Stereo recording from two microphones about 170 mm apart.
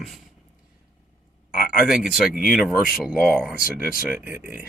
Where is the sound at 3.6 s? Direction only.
60° left (ahead or behind).